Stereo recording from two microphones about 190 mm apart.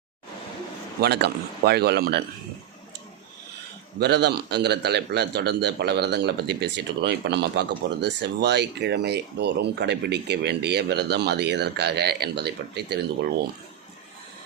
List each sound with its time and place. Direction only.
1.0 s a man's voice: 60° right (ahead or behind)
4.0 s a man's voice: 60° right (ahead or behind)